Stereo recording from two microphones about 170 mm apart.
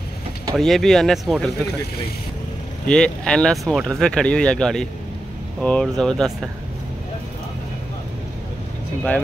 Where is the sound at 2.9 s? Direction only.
5° left (ahead or behind).